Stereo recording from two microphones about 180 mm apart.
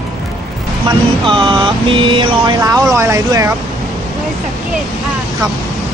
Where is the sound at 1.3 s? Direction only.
25° right (ahead or behind).